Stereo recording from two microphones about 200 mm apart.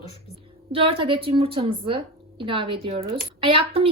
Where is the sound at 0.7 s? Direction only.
25° right (ahead or behind).